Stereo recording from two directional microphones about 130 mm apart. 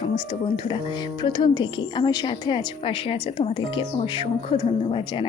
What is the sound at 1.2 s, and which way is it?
A woman's voice, 40° left (ahead or behind).